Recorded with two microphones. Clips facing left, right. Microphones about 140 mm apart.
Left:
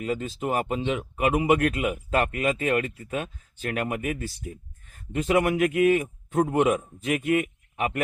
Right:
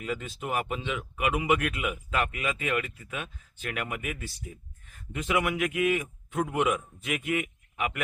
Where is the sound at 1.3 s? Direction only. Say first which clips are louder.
Left 5 dB; 40° left (ahead or behind).